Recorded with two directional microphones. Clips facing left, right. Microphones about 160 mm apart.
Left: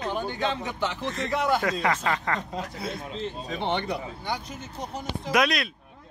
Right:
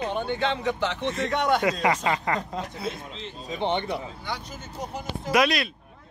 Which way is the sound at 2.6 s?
25° right (ahead or behind).